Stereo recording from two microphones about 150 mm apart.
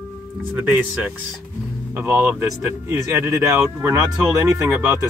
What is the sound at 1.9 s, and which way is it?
Speech, 15° right (ahead or behind).